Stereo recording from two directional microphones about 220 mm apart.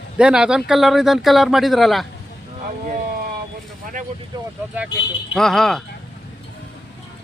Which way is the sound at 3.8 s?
35° right (ahead or behind).